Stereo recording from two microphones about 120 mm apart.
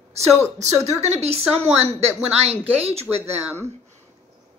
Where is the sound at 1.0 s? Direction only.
65° right (ahead or behind).